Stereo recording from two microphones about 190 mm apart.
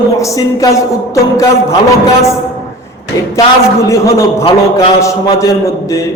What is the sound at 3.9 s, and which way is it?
A man's voice, 15° left (ahead or behind).